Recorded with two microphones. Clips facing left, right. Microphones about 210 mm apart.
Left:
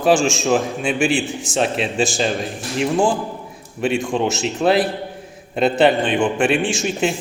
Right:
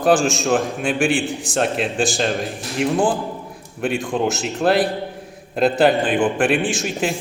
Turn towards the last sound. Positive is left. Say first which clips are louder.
# left 2 dB
turn(degrees=0)  # may be behind; listen again after turning